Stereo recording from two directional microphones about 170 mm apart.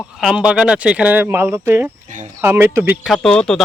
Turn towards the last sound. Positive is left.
turn(degrees=5)  # may be behind; listen again after turning